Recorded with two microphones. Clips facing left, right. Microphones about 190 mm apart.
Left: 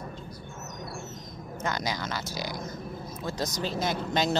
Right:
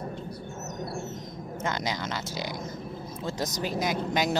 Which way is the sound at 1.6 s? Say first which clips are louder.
Even; 25° right (ahead or behind).